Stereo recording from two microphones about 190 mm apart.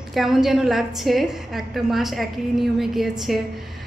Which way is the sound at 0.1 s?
Centre (ahead or behind).